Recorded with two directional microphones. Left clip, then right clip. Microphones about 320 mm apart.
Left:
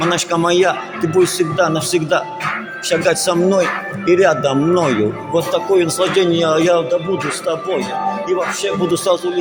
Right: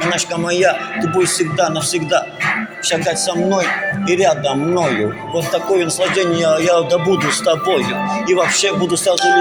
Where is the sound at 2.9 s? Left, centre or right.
Left.